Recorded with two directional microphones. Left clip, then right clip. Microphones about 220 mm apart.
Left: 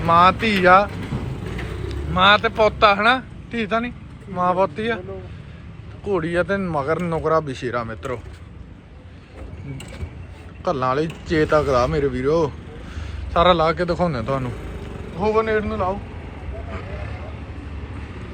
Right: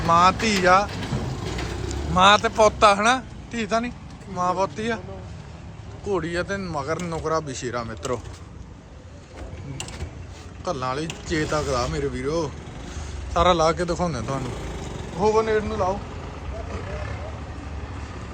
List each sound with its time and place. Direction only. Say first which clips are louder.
0.1 s speech: left 3 dB; 10° right (ahead or behind)
1.9 s vehicle: left 1 dB; 15° right (ahead or behind)
2.6 s speech: left 1 dB; 15° right (ahead or behind)
6.1 s speech: left 5 dB; 10° right (ahead or behind)
10.6 s speech: left 6 dB; 5° right (ahead or behind)